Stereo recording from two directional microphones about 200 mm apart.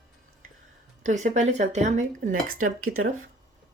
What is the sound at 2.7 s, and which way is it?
Speech, 90° right.